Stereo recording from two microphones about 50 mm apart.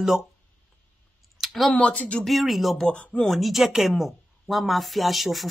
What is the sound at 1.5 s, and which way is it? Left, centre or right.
Speech, centre.